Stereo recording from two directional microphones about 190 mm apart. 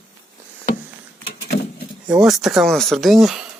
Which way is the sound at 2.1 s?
Centre (ahead or behind).